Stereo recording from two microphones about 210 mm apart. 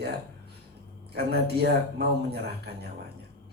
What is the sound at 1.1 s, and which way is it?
Speech, 50° right (ahead or behind).